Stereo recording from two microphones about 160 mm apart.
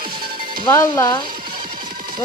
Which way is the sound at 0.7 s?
15° left (ahead or behind).